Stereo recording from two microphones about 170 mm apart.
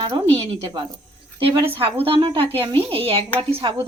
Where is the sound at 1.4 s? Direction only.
30° right (ahead or behind).